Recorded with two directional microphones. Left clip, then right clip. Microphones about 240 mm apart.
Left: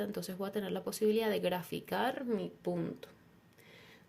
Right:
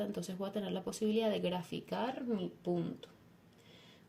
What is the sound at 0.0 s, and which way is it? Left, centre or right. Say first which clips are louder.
Speech: left 1 dB; left.